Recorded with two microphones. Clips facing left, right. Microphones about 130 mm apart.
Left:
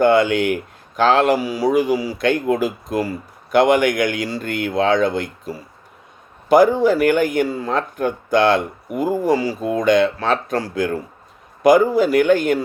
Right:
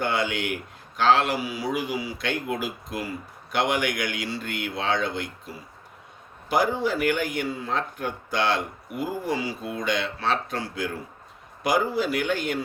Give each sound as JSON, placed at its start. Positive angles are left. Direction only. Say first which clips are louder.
{"t": 0.0, "sound": "speech", "louder": "left 12 dB", "side_deg": 50}